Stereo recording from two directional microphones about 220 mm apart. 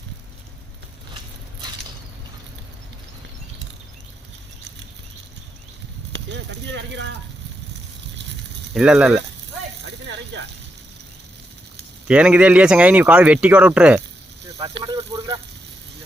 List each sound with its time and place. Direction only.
6.1 s speech: 55° right (ahead or behind)
8.7 s speech: 5° right (ahead or behind)
9.8 s snake: 55° right (ahead or behind)
12.0 s speech: 5° right (ahead or behind)
14.6 s speech: 20° right (ahead or behind)